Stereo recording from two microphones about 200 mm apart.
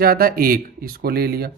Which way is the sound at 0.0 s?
50° right (ahead or behind).